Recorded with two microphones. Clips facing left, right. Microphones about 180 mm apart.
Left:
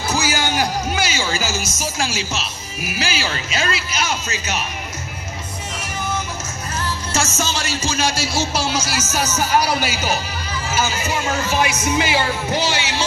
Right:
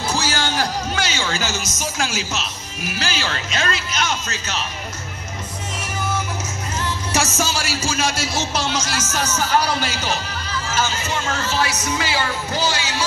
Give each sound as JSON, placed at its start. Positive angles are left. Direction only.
{"t": 0.1, "sound": "music", "side_deg": 10}
{"t": 1.8, "sound": "speech", "side_deg": 0}
{"t": 6.8, "sound": "speech", "side_deg": -15}